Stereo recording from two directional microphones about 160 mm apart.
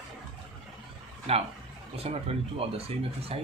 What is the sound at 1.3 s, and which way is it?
Speech, 40° right (ahead or behind).